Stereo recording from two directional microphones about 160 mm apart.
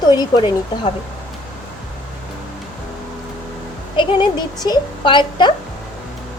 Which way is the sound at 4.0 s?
30° left (ahead or behind).